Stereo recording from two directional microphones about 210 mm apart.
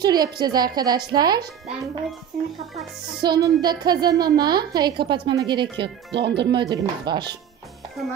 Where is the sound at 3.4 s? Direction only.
20° right (ahead or behind).